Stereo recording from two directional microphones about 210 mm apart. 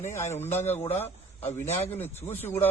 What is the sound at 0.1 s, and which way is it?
Speech, 10° left (ahead or behind).